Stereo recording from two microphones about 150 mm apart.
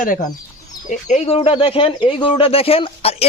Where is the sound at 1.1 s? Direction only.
40° left (ahead or behind).